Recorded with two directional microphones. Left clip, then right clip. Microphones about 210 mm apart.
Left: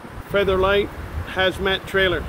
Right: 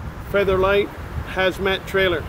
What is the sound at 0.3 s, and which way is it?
Speech, 5° right (ahead or behind).